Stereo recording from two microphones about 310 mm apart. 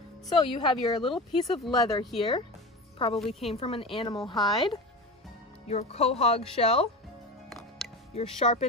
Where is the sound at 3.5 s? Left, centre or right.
Centre.